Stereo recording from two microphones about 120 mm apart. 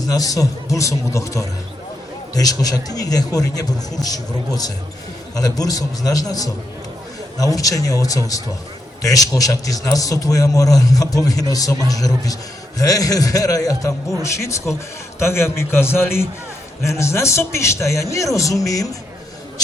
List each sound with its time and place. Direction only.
0.0 s a man's voice: 30° left (ahead or behind)